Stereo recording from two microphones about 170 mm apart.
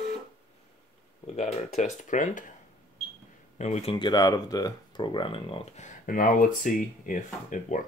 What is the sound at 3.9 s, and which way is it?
Speech, 25° left (ahead or behind).